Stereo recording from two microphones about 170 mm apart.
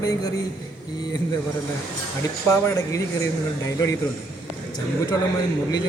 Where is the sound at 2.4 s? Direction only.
20° left (ahead or behind).